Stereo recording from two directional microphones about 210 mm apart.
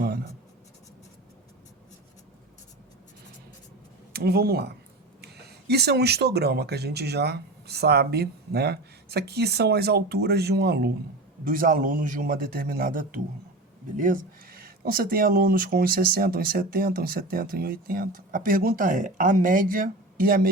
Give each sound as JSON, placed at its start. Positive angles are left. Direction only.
{"t": 4.1, "sound": "a man's voice", "side_deg": -50}